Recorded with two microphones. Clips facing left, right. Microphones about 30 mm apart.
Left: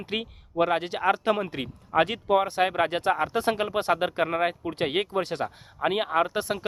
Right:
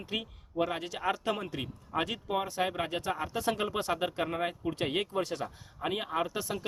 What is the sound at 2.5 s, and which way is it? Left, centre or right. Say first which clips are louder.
Speech: left 8 dB; left.